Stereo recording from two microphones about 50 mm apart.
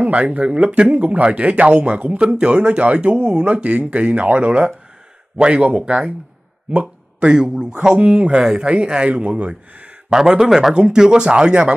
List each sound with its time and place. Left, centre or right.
0.0 s a man's voice: right